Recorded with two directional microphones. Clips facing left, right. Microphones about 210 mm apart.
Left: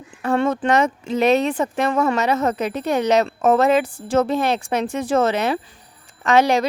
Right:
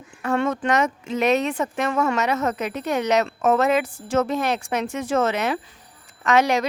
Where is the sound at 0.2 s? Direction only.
30° left (ahead or behind).